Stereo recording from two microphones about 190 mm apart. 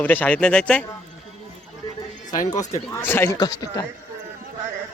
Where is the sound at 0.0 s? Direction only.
10° left (ahead or behind).